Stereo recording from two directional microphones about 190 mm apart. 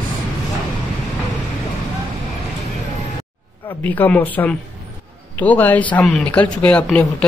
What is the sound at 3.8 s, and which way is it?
Speech, 10° left (ahead or behind).